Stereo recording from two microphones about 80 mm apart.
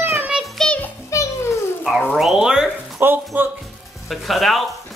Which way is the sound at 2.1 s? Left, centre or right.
Centre.